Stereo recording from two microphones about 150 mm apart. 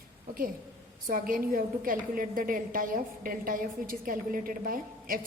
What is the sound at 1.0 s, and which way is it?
A woman's voice, 70° right (ahead or behind).